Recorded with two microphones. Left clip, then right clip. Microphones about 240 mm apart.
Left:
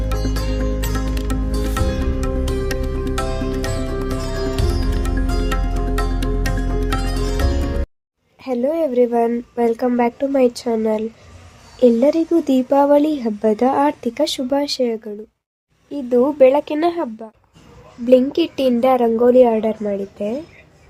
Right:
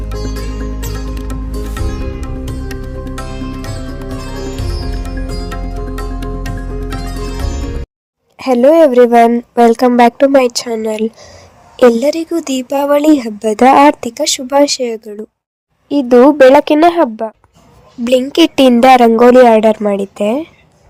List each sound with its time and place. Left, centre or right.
0.1 s music: centre
8.4 s a woman's voice: right